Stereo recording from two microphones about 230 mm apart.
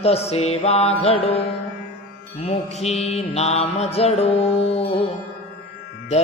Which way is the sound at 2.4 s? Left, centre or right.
Left.